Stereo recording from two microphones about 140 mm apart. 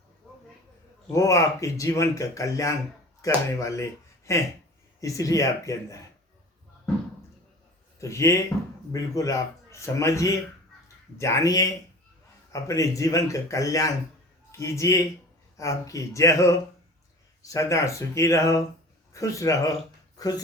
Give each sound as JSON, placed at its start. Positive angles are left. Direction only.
{"t": 1.1, "sound": "speech", "side_deg": 25}
{"t": 7.9, "sound": "speech", "side_deg": 20}